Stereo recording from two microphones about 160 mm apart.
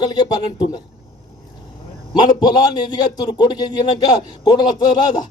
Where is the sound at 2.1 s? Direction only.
30° left (ahead or behind).